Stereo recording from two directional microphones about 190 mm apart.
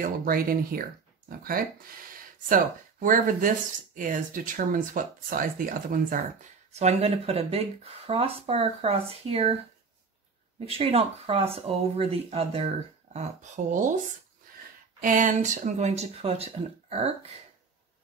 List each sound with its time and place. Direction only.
0.0 s speech: 50° right (ahead or behind)
6.7 s speech: 35° right (ahead or behind)
10.8 s speech: 30° right (ahead or behind)
15.0 s speech: 45° right (ahead or behind)